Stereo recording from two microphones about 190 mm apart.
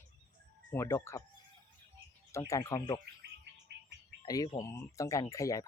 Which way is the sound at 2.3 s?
15° left (ahead or behind).